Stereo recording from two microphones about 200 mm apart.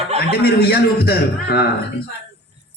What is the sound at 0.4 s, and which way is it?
A man's voice, 50° left (ahead or behind).